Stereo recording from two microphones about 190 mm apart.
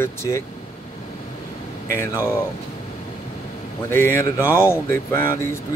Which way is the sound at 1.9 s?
15° left (ahead or behind).